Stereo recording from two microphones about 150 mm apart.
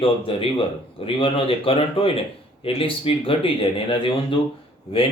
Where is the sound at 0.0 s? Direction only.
35° left (ahead or behind).